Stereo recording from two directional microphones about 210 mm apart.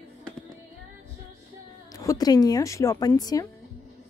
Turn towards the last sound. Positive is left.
turn(degrees=20)  # may be behind; listen again after turning